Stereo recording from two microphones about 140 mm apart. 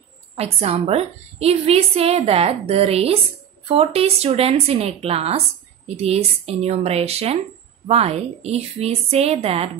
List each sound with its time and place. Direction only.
0.4 s a woman's voice: 45° right (ahead or behind)